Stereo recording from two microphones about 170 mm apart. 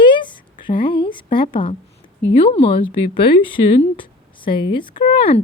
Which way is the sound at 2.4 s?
35° left (ahead or behind).